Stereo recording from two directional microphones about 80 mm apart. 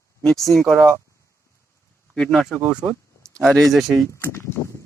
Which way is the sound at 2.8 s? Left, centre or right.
Right.